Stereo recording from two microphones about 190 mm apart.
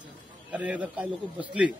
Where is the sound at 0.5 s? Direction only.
5° right (ahead or behind).